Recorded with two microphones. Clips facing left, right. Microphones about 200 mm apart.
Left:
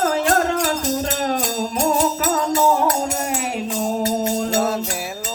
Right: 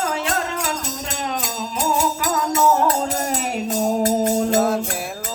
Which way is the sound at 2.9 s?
40° right (ahead or behind).